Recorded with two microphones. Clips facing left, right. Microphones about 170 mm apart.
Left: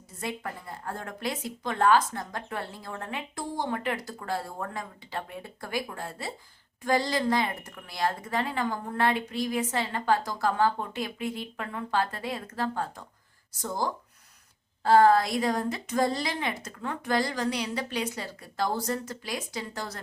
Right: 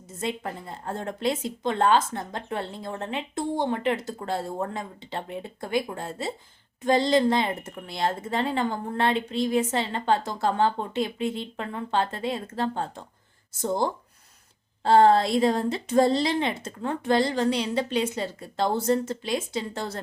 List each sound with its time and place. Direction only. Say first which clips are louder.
0.2 s speech: right 4 dB; 25° right (ahead or behind)